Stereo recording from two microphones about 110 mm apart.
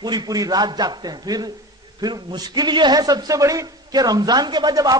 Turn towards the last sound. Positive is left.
turn(degrees=-40)  # may be behind; listen again after turning